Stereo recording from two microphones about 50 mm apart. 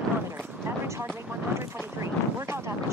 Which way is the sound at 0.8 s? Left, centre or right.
Right.